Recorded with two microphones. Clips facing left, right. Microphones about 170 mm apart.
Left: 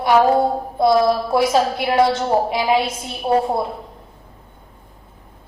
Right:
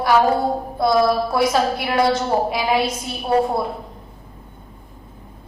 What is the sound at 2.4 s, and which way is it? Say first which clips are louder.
Speech: left 2 dB; 25° left (ahead or behind).